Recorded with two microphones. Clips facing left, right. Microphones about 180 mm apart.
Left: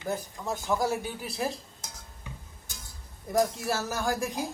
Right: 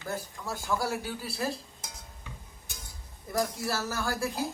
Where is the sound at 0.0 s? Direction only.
20° left (ahead or behind).